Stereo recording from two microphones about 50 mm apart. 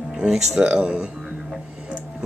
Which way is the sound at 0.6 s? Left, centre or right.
Right.